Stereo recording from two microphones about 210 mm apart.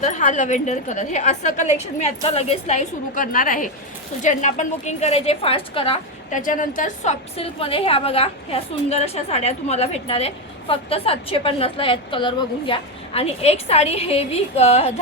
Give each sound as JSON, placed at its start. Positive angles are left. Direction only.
{"t": 0.0, "sound": "a woman's voice", "side_deg": 35}